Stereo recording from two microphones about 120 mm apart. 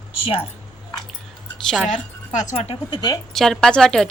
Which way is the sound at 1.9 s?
90° left.